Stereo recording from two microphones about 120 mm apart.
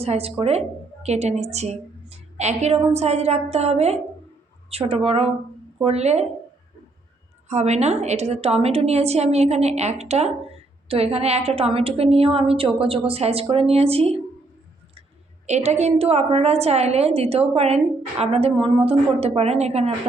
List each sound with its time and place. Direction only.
0.0 s a woman's voice: 55° right (ahead or behind)
7.4 s a woman's voice: 70° right (ahead or behind)
15.4 s a woman's voice: 70° right (ahead or behind)